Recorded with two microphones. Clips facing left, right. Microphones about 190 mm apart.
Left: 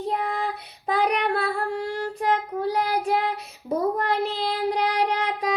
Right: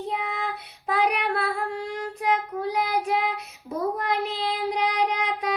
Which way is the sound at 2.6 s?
30° left (ahead or behind).